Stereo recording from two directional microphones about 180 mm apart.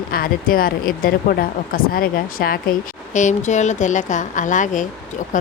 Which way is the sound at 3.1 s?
40° left (ahead or behind).